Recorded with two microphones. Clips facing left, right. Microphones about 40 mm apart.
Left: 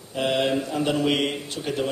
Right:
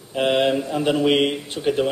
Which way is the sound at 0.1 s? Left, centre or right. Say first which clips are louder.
Right 4 dB; right.